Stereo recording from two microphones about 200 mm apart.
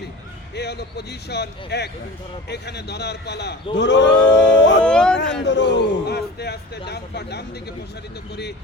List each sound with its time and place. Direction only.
0.5 s a man's voice: 55° left (ahead or behind)
4.8 s speech: 5° left (ahead or behind)
5.5 s a man's voice: 60° left (ahead or behind)